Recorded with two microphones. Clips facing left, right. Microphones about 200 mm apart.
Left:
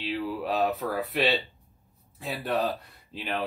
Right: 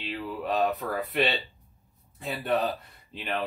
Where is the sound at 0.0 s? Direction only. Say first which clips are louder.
Left 3 dB; 5° left (ahead or behind).